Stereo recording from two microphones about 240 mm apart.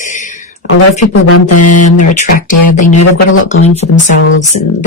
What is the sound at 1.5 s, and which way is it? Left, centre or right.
Speech, left.